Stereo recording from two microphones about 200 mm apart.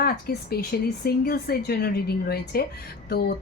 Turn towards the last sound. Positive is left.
turn(degrees=50)  # may be behind; listen again after turning